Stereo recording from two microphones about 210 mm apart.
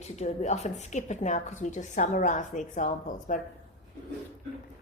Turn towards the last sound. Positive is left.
turn(degrees=35)  # may be behind; listen again after turning